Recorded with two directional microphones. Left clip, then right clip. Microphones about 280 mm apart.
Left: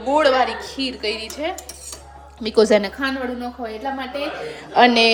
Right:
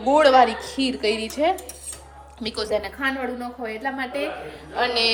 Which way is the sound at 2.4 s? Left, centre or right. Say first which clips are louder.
Left 10 dB; centre.